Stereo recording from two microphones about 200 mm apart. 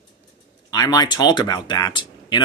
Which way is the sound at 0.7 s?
20° left (ahead or behind).